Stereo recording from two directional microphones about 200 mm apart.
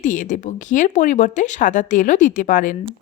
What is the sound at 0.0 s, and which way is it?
Speech, 40° left (ahead or behind).